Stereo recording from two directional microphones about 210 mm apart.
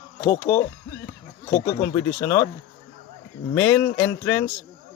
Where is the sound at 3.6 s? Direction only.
10° left (ahead or behind).